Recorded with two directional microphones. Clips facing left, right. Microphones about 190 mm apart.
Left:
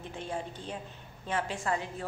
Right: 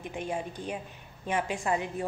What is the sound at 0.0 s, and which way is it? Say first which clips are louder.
A woman's voice: right 3 dB; 15° right (ahead or behind).